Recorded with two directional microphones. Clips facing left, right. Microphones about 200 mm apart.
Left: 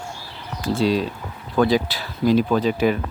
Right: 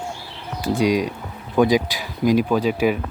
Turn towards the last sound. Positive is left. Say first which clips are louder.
# even
turn(degrees=-10)  # may be behind; listen again after turning